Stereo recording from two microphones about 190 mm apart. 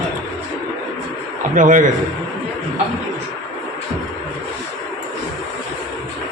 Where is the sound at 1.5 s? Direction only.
45° right (ahead or behind).